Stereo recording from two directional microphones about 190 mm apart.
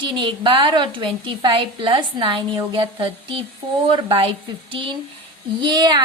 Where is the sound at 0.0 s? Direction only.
25° right (ahead or behind).